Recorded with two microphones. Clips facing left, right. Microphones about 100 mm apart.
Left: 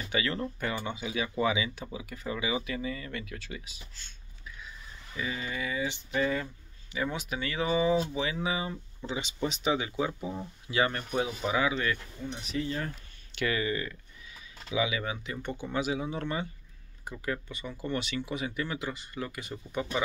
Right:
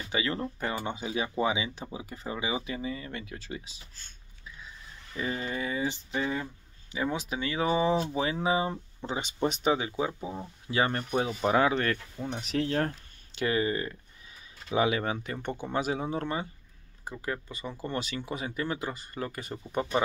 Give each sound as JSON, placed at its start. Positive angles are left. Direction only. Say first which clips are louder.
{"t": 0.1, "sound": "speech", "louder": "even", "side_deg": -25}
{"t": 5.1, "sound": "speech", "louder": "right 3 dB", "side_deg": -40}
{"t": 6.1, "sound": "speech", "louder": "left 5 dB", "side_deg": -20}
{"t": 9.8, "sound": "speech", "louder": "even", "side_deg": -30}
{"t": 12.4, "sound": "speech", "louder": "right 5 dB", "side_deg": -75}
{"t": 13.4, "sound": "speech", "louder": "right 2 dB", "side_deg": -30}
{"t": 14.7, "sound": "speech", "louder": "right 4 dB", "side_deg": -50}